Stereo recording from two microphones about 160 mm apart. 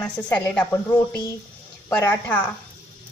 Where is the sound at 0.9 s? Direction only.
25° left (ahead or behind).